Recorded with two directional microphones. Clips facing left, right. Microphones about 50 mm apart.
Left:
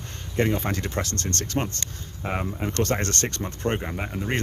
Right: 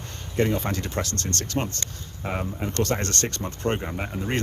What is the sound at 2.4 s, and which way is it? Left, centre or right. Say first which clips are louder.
Speech: even; left.